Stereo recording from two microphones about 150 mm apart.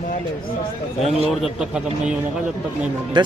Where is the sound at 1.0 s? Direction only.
40° left (ahead or behind).